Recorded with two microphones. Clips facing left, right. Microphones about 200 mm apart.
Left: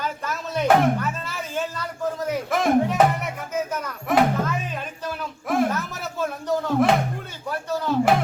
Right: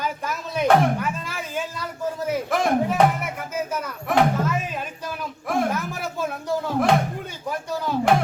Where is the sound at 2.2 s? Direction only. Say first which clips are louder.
Even; centre (ahead or behind).